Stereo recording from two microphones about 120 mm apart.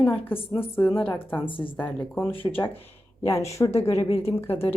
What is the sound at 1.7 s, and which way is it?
Speech, 15° left (ahead or behind).